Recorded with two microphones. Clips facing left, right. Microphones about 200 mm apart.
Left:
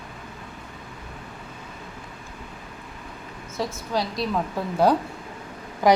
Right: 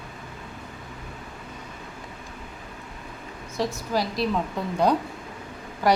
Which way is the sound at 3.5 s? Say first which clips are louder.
Right 1 dB; centre (ahead or behind).